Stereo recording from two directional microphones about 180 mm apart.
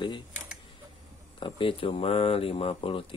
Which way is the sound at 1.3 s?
30° left (ahead or behind).